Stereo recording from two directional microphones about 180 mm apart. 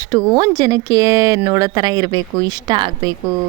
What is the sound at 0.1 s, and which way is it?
A woman's voice, 20° right (ahead or behind).